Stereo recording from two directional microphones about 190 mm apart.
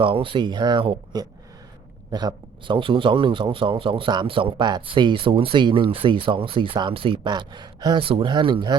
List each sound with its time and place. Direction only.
0.0 s a man's voice: 25° right (ahead or behind)